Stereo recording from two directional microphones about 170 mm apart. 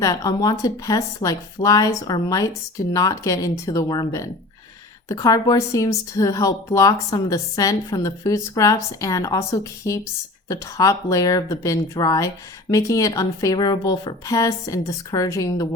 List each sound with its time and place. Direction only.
0.0 s a woman's voice: 20° left (ahead or behind)